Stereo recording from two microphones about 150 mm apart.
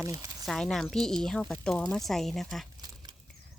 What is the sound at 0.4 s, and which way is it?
Speech, centre (ahead or behind).